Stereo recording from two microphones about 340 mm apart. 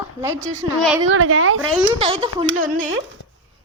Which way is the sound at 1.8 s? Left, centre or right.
Centre.